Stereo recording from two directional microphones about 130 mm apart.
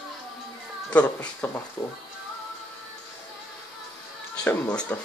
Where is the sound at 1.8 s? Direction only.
30° left (ahead or behind).